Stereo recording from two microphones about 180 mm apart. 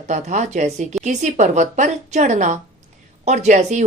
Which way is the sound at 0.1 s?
40° right (ahead or behind).